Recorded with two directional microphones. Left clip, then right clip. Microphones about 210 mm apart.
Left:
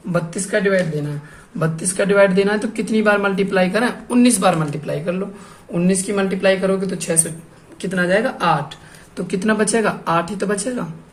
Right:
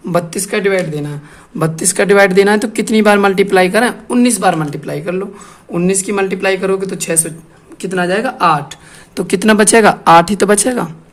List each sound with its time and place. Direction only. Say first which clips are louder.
0.1 s speech: right 4 dB; 50° right (ahead or behind)